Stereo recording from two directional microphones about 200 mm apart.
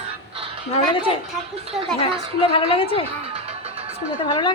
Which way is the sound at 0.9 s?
25° left (ahead or behind).